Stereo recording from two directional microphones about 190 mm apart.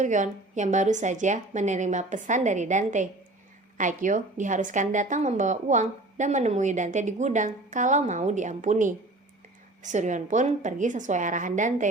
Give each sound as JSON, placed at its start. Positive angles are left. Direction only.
{"t": 0.0, "sound": "a woman's voice", "side_deg": -40}